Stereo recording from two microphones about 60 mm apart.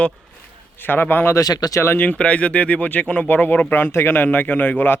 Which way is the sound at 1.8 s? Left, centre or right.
Left.